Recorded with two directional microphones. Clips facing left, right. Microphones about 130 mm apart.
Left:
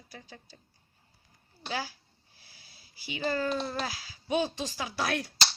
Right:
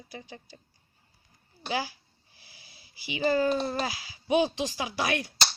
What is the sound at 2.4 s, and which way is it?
Wheeze, 90° right.